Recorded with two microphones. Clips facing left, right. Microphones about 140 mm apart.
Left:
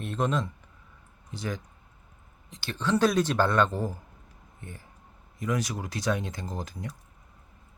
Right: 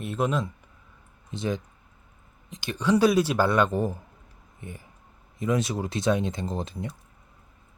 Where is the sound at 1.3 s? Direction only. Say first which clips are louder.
Right 5 dB; 20° right (ahead or behind).